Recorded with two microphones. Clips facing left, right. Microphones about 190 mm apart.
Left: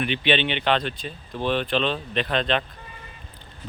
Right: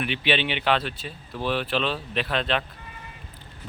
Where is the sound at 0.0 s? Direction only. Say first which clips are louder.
Left 2 dB; 5° right (ahead or behind).